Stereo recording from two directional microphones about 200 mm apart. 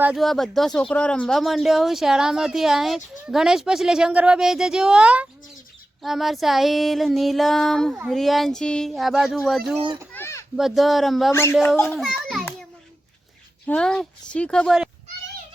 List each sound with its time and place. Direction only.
0.0 s speech: centre (ahead or behind)
9.8 s a child's voice: 25° right (ahead or behind)
10.1 s children playing: 10° left (ahead or behind)
10.6 s speech: centre (ahead or behind)
11.3 s speech: 10° left (ahead or behind)
11.9 s children playing: centre (ahead or behind)
13.7 s speech: 5° left (ahead or behind)